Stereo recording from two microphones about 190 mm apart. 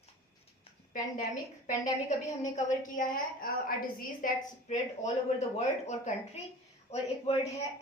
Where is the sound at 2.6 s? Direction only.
45° left (ahead or behind).